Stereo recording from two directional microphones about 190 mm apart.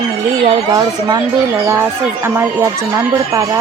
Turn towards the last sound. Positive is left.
turn(degrees=-15)  # may be behind; listen again after turning